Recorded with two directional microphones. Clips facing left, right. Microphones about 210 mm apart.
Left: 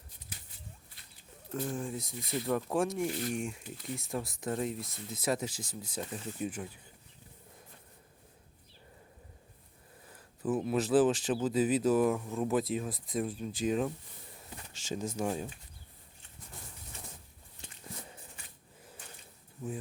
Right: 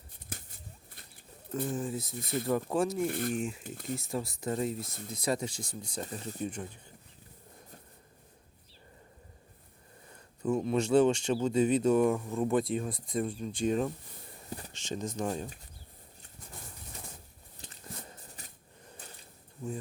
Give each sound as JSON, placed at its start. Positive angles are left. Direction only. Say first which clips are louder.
{"t": 0.3, "sound": "a sound", "louder": "right 5 dB", "side_deg": -50}
{"t": 1.5, "sound": "speech", "louder": "right 2 dB", "side_deg": 0}
{"t": 3.1, "sound": "speech", "louder": "right 2 dB", "side_deg": -55}
{"t": 3.3, "sound": "speech", "louder": "right 2 dB", "side_deg": 0}
{"t": 3.6, "sound": "speech", "louder": "right 3 dB", "side_deg": -50}
{"t": 3.9, "sound": "speech", "louder": "right 2 dB", "side_deg": 0}
{"t": 10.1, "sound": "speech", "louder": "right 2 dB", "side_deg": 5}
{"t": 18.4, "sound": "a sound", "louder": "right 3 dB", "side_deg": -40}